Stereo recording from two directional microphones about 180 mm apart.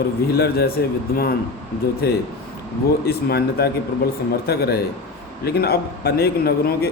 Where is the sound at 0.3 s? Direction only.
60° left (ahead or behind).